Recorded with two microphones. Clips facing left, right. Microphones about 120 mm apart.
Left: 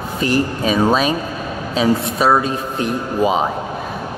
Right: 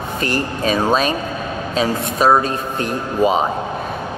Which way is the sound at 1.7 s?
45° right (ahead or behind).